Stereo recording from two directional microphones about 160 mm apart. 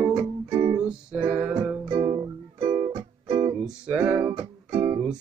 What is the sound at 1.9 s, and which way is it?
Music, 30° right (ahead or behind).